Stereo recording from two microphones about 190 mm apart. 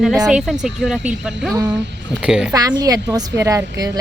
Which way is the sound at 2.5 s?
20° right (ahead or behind).